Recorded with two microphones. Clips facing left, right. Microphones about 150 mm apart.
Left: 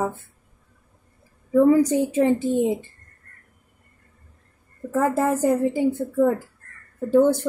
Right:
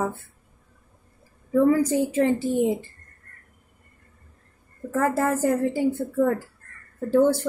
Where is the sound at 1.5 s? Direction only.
20° left (ahead or behind).